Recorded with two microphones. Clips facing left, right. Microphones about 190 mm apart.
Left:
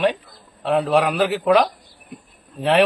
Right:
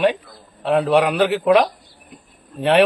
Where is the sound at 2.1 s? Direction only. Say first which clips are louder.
Left 6 dB; 60° left (ahead or behind).